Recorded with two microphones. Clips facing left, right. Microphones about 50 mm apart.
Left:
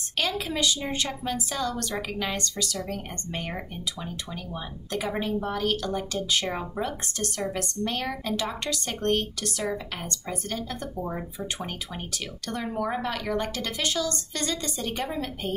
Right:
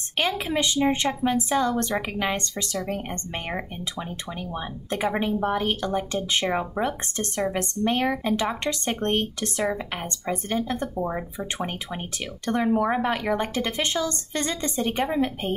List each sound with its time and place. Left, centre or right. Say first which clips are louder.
0.2 s a woman's voice: right 3 dB; right